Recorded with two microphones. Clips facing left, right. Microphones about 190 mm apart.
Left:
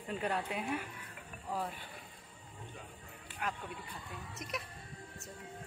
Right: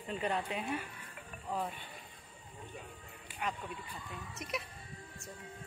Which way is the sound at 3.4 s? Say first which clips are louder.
Right 1 dB; centre (ahead or behind).